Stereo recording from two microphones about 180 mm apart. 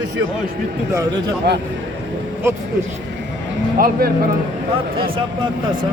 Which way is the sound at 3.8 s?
55° right (ahead or behind).